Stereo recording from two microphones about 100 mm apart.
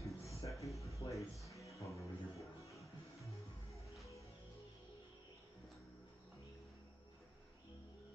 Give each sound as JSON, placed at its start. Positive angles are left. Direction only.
{"t": 0.0, "sound": "a sound", "side_deg": 30}
{"t": 0.8, "sound": "music", "side_deg": 30}
{"t": 1.2, "sound": "music", "side_deg": 0}
{"t": 1.5, "sound": "music", "side_deg": 30}